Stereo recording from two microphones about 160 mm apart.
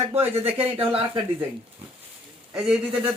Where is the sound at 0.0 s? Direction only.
15° right (ahead or behind).